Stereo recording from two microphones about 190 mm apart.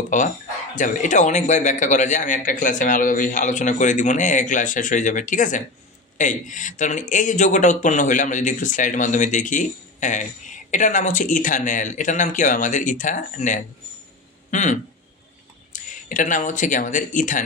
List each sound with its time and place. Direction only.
0.7 s speech: 40° left (ahead or behind)